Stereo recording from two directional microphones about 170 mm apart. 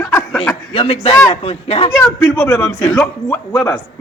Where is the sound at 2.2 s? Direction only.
10° left (ahead or behind).